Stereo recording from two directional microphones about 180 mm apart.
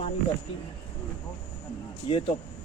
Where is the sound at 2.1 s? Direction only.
25° left (ahead or behind).